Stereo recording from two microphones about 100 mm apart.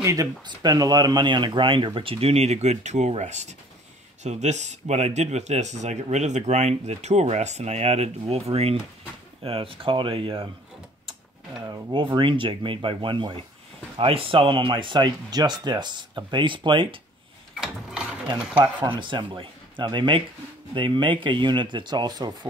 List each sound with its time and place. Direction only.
0.0 s speech: 35° right (ahead or behind); by 3.2 s 90° right
4.8 s speech: 90° right
9.4 s speech: 65° right (ahead or behind)
11.7 s speech: 55° right (ahead or behind)
18.6 s speech: 50° right (ahead or behind)